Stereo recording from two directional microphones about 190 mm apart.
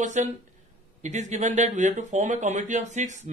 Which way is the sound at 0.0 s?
40° right (ahead or behind).